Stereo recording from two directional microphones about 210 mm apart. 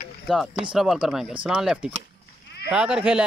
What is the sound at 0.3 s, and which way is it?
Speech, centre (ahead or behind).